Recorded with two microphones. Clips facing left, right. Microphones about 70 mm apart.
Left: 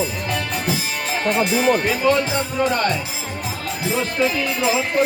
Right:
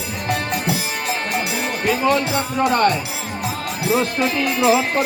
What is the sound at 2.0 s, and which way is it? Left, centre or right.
Music, right.